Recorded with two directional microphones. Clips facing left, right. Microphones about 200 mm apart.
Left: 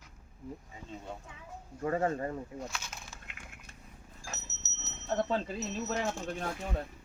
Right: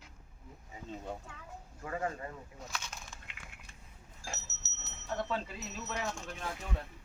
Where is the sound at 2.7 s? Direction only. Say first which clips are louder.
Left 1 dB; 5° left (ahead or behind).